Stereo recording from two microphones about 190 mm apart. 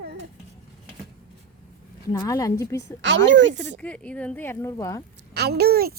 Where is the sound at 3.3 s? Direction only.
70° right (ahead or behind).